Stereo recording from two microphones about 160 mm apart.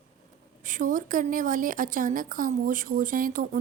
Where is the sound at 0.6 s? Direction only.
55° right (ahead or behind).